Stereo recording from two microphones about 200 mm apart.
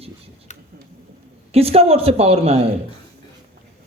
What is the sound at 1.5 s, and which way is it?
Speech, 30° right (ahead or behind).